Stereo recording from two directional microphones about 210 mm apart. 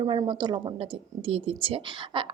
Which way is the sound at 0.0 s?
20° right (ahead or behind).